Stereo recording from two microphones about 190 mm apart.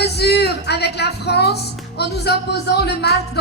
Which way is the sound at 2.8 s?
60° left (ahead or behind).